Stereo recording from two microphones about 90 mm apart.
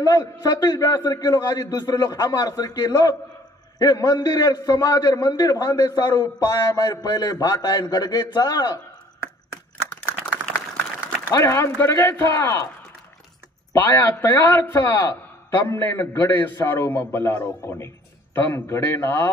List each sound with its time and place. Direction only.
0.0 s a man's voice: 50° left (ahead or behind)
11.3 s a man's voice: 30° left (ahead or behind)
13.7 s a man's voice: 25° left (ahead or behind)